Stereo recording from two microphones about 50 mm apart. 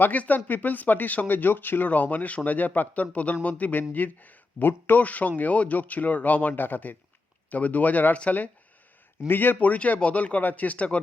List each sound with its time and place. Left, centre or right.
0.0 s speech: left
9.2 s speech: left